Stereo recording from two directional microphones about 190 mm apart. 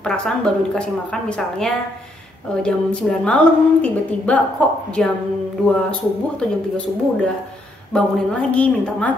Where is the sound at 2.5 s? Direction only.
5° left (ahead or behind).